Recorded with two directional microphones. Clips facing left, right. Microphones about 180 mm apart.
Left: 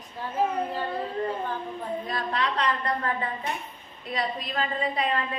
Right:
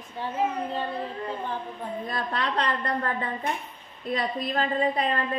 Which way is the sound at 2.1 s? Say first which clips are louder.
Even; 50° right (ahead or behind).